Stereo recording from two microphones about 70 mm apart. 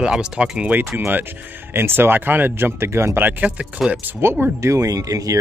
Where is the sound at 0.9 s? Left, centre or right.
Right.